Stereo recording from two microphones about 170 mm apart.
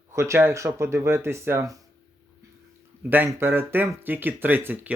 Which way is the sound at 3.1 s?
15° right (ahead or behind).